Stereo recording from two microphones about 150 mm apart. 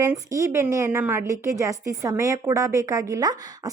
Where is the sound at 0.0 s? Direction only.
20° right (ahead or behind).